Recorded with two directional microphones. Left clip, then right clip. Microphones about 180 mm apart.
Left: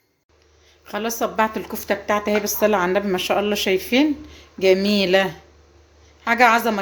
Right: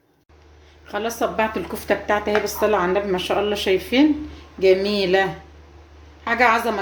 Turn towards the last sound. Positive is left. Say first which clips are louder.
# left 2 dB
turn(degrees=45)  # may be behind; listen again after turning